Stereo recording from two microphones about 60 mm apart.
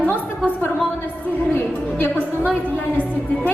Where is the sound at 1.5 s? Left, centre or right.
Left.